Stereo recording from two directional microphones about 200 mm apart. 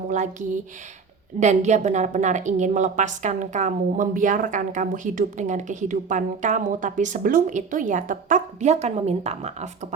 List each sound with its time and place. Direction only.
0.1 s a woman's voice: 40° right (ahead or behind)